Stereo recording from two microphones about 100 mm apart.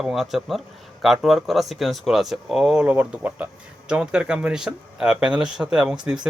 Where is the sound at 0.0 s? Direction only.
5° right (ahead or behind).